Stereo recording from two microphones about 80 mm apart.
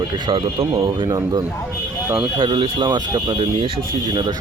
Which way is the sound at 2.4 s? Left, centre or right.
Right.